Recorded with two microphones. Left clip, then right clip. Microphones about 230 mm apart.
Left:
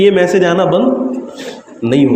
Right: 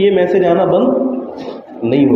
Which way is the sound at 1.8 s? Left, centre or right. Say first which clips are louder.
Left 1 dB; left.